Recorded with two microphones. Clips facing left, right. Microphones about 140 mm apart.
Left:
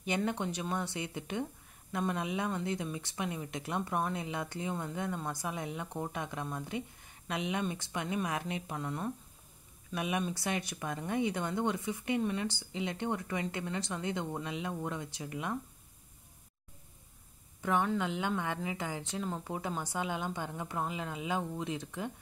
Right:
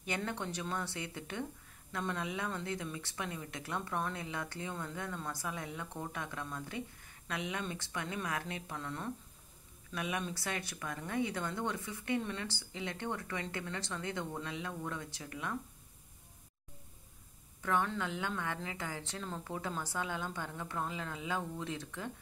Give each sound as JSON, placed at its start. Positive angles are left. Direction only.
{"t": 0.0, "sound": "a woman's voice", "side_deg": 20}
{"t": 17.6, "sound": "a woman's voice", "side_deg": 20}